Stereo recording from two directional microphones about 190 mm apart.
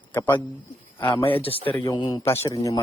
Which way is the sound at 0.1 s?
10° left (ahead or behind).